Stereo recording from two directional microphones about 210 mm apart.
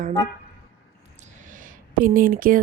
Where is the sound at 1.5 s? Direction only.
40° right (ahead or behind).